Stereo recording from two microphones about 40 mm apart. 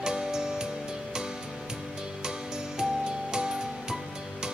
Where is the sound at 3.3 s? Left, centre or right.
Centre.